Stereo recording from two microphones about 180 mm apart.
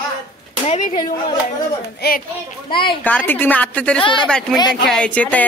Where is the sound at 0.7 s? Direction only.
40° left (ahead or behind).